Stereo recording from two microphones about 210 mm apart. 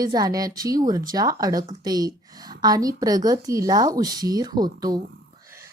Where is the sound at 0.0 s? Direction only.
20° right (ahead or behind).